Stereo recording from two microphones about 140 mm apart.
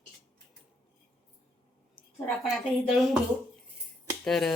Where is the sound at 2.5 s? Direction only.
Centre (ahead or behind).